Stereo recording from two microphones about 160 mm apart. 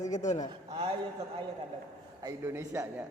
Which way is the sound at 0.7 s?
30° right (ahead or behind).